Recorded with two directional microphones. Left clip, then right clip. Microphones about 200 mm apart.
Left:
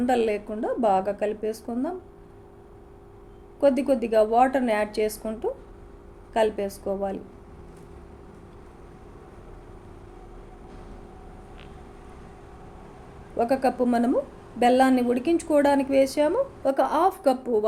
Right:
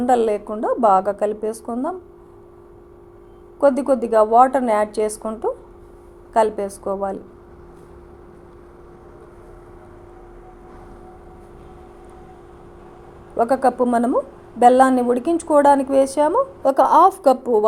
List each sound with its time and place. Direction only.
0.0 s a woman's voice: 15° right (ahead or behind)
3.6 s a woman's voice: 15° right (ahead or behind)
13.3 s a woman's voice: 10° right (ahead or behind)
16.6 s a woman's voice: 25° right (ahead or behind)